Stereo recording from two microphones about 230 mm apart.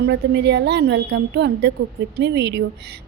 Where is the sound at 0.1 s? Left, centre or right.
Right.